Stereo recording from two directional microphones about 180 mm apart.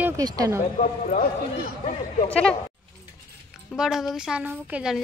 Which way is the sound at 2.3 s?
5° left (ahead or behind).